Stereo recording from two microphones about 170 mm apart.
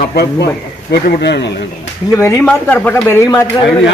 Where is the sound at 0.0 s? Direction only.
70° left (ahead or behind).